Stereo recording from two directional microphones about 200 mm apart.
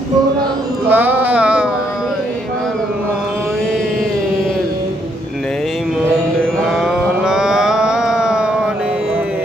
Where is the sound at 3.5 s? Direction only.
Centre (ahead or behind).